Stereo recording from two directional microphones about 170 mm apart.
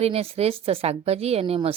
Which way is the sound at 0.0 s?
35° right (ahead or behind).